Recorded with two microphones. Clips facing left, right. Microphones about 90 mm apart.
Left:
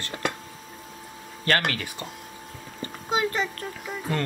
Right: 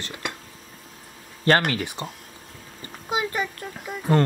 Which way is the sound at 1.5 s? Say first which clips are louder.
Right 5 dB; 25° right (ahead or behind).